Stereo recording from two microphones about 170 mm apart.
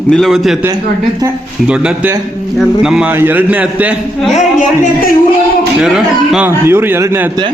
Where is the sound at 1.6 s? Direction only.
5° right (ahead or behind).